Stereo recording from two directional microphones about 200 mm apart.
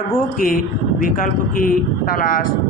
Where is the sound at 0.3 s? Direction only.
45° left (ahead or behind).